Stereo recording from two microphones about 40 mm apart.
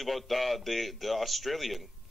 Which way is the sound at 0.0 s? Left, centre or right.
Centre.